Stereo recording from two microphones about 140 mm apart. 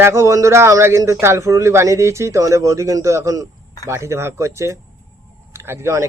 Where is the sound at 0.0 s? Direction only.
20° right (ahead or behind).